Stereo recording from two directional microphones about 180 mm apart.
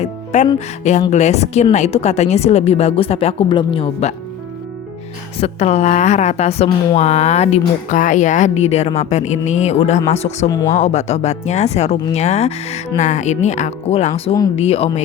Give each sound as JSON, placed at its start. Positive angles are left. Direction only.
{"t": 0.0, "sound": "music", "side_deg": 40}
{"t": 1.1, "sound": "a woman's voice", "side_deg": 40}
{"t": 5.4, "sound": "a woman's voice", "side_deg": 35}
{"t": 10.5, "sound": "speech", "side_deg": 20}
{"t": 10.8, "sound": "a woman's voice", "side_deg": 40}